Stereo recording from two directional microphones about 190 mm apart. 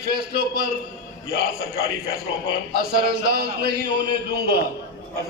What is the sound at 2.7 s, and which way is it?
A man's voice, 55° right (ahead or behind).